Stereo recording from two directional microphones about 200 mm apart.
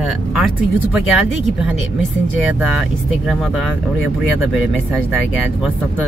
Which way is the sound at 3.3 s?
Centre (ahead or behind).